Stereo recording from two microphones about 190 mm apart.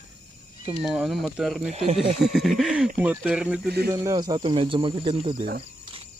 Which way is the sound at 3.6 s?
55° right (ahead or behind).